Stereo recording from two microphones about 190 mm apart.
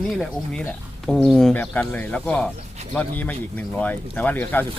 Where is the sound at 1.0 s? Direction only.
Centre (ahead or behind).